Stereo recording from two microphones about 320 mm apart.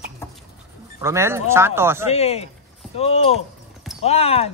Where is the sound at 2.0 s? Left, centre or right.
Centre.